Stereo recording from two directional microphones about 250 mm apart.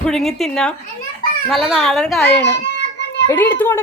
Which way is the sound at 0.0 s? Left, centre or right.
Centre.